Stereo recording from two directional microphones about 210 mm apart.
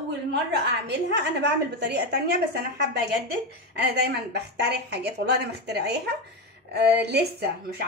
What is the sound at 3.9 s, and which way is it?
A woman's voice, 50° right (ahead or behind).